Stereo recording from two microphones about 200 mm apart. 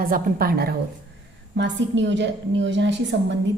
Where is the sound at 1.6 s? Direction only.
65° right (ahead or behind).